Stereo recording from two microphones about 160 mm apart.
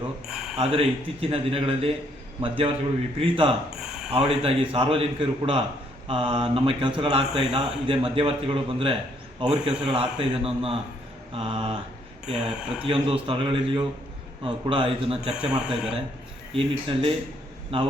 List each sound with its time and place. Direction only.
0.3 s a sound: 5° right (ahead or behind)
0.5 s a man's voice: 35° right (ahead or behind)
3.8 s a sound: 5° right (ahead or behind)
4.1 s a man's voice: 35° right (ahead or behind)
12.2 s speech: 5° right (ahead or behind)
12.8 s a man's voice: 35° right (ahead or behind)
15.3 s speech: 5° right (ahead or behind)
16.6 s a man's voice: 35° right (ahead or behind)